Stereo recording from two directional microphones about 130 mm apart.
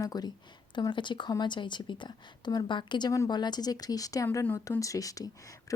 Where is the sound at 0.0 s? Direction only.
30° left (ahead or behind).